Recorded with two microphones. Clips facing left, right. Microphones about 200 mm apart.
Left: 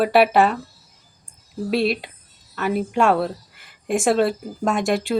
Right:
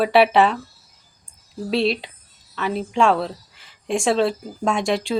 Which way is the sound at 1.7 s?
50° left (ahead or behind).